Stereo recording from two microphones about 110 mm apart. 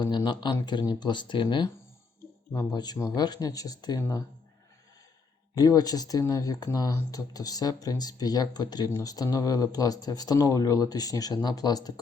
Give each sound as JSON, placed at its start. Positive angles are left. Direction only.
{"t": 0.3, "sound": "speech", "side_deg": 45}
{"t": 2.7, "sound": "speech", "side_deg": 35}
{"t": 5.5, "sound": "speech", "side_deg": 35}